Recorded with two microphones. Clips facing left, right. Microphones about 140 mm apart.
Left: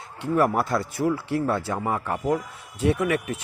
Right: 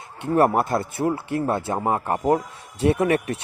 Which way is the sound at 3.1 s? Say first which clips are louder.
Right 4 dB; 70° right (ahead or behind).